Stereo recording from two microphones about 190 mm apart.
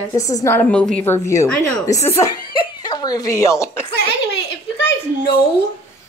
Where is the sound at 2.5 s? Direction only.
20° left (ahead or behind).